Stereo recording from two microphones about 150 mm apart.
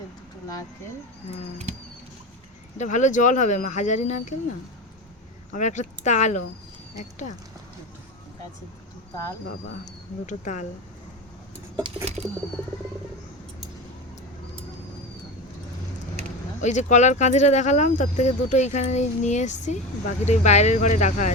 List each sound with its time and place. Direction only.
2.7 s speech: 55° left (ahead or behind)
5.5 s speech: 55° left (ahead or behind)
9.8 s speech: 55° left (ahead or behind)
12.0 s a sound: 45° right (ahead or behind)
16.6 s speech: 50° left (ahead or behind)